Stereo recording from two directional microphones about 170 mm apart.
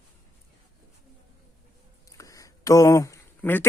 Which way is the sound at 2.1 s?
20° left (ahead or behind).